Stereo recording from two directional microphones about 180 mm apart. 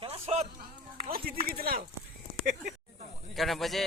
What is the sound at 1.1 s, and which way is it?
Speech, 55° right (ahead or behind).